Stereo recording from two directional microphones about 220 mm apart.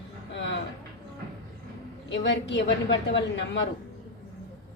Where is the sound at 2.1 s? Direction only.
55° left (ahead or behind).